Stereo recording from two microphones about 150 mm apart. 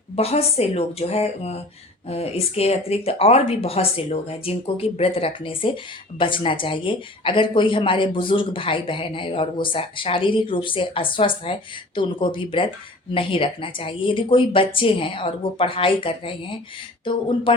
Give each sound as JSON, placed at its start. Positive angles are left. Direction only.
{"t": 0.2, "sound": "speech", "side_deg": 40}